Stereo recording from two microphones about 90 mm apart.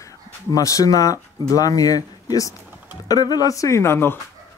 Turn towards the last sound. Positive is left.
turn(degrees=25)  # may be behind; listen again after turning